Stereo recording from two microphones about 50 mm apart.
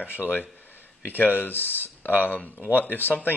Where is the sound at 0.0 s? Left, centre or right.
Left.